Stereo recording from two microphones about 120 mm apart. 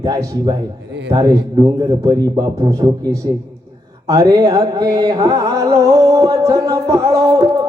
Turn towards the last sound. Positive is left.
turn(degrees=-30)  # may be behind; listen again after turning